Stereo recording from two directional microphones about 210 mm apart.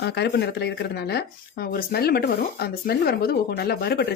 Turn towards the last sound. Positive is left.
turn(degrees=50)  # may be behind; listen again after turning